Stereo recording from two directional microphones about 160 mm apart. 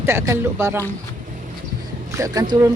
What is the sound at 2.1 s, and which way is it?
Speech, 20° right (ahead or behind).